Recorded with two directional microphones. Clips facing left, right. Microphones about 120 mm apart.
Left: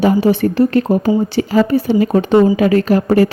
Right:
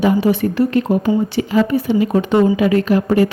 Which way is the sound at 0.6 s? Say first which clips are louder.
Left 2 dB; 40° left (ahead or behind).